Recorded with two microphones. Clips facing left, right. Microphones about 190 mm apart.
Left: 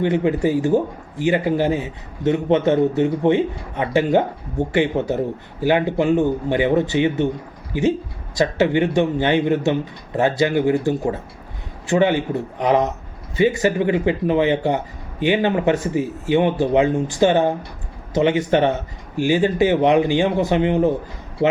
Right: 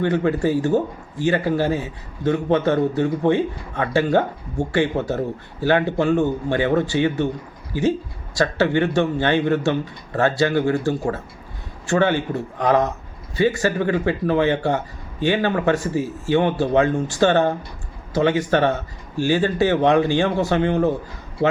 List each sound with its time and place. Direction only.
0.0 s a man's voice: 15° left (ahead or behind)